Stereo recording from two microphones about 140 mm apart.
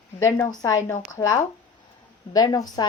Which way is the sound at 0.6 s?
25° left (ahead or behind).